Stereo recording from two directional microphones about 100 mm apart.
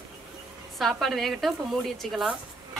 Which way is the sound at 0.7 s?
Centre (ahead or behind).